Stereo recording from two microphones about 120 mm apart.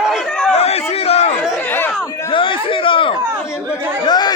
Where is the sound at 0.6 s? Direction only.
60° left (ahead or behind).